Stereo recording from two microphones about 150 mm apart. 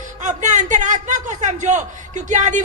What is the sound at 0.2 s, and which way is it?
A man's voice, 50° right (ahead or behind).